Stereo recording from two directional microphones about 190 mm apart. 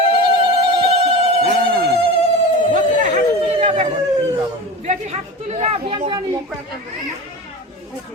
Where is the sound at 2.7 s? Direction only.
40° right (ahead or behind).